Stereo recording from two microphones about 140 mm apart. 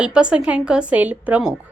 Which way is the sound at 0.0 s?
5° right (ahead or behind).